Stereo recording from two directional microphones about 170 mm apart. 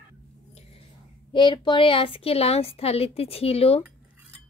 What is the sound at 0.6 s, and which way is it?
Whispering, 35° left (ahead or behind).